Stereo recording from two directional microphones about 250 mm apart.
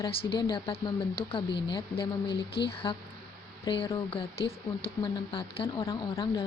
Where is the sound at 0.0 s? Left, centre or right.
Left.